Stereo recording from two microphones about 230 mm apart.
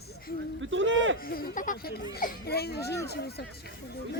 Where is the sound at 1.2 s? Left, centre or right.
Left.